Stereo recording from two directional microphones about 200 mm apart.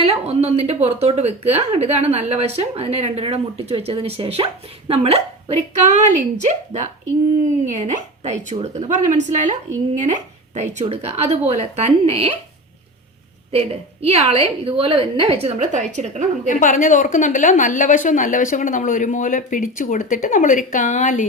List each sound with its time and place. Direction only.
0.0 s a woman's voice: 30° right (ahead or behind)
13.5 s a woman's voice: 30° right (ahead or behind)
16.5 s a woman's voice: 40° left (ahead or behind)